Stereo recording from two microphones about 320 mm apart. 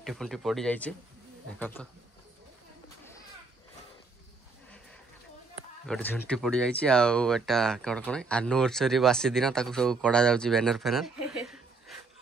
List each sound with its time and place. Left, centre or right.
0.0 s speech: centre
5.9 s speech: centre